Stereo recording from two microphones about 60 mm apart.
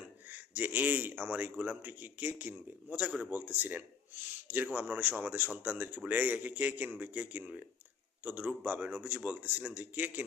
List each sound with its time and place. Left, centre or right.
0.3 s a man's voice: right